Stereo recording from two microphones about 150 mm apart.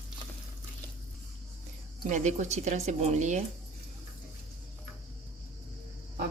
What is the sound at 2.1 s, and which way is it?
A woman's voice, 55° right (ahead or behind).